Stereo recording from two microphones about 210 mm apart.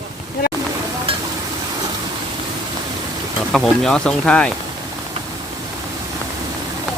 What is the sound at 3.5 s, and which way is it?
Speech, centre (ahead or behind).